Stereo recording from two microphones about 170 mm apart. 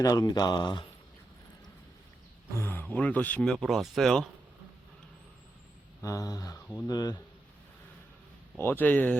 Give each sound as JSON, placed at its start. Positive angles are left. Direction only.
{"t": 0.0, "sound": "speech", "side_deg": 20}
{"t": 2.6, "sound": "speech", "side_deg": 10}
{"t": 6.0, "sound": "speech", "side_deg": 20}
{"t": 8.5, "sound": "speech", "side_deg": 10}